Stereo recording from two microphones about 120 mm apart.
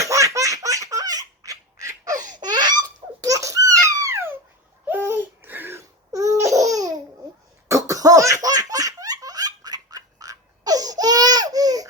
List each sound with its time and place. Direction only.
0.0 s laughter: 25° right (ahead or behind)
2.3 s baby laughter: 35° right (ahead or behind); by 4.4 s 20° right (ahead or behind)
4.9 s laughter: 20° right (ahead or behind)